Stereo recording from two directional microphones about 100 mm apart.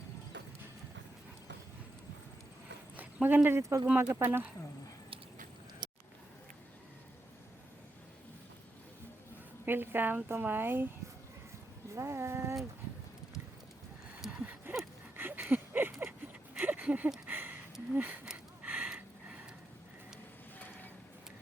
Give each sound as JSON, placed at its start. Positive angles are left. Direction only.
{"t": 2.9, "sound": "speech", "side_deg": -15}
{"t": 3.8, "sound": "speech", "side_deg": -20}
{"t": 9.6, "sound": "speech", "side_deg": -20}
{"t": 11.9, "sound": "speech", "side_deg": -25}
{"t": 14.2, "sound": "a sound", "side_deg": -10}